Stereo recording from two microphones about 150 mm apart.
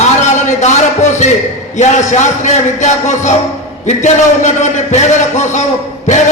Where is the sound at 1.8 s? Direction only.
55° left (ahead or behind).